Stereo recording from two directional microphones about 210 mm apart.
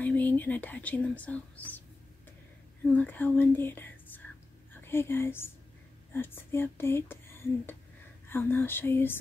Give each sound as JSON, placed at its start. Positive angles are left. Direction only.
{"t": 0.0, "sound": "speech", "side_deg": 10}
{"t": 3.0, "sound": "speech", "side_deg": 10}